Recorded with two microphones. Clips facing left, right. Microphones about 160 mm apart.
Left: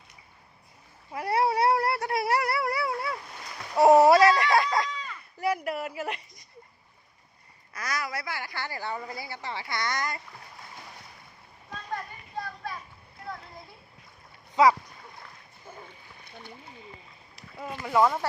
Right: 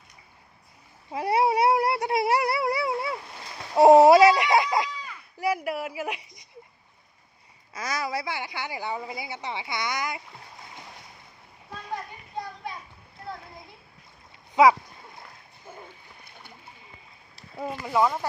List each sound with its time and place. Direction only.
1.1 s cat: 20° right (ahead or behind)
3.8 s a sound: 25° right (ahead or behind)
4.1 s a sound: 10° right (ahead or behind)
7.7 s a woman's voice: 25° right (ahead or behind)
12.6 s children playing: 15° right (ahead or behind)
14.5 s speech: 15° right (ahead or behind)
17.8 s a woman's voice: 5° right (ahead or behind)